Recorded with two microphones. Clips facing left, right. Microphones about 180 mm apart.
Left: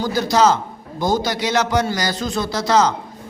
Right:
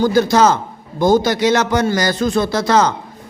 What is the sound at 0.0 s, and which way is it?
A man's voice, 55° right (ahead or behind).